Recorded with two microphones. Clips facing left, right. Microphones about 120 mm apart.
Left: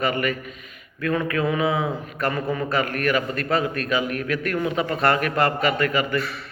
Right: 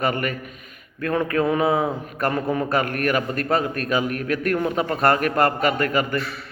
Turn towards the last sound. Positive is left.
turn(degrees=-45)  # may be behind; listen again after turning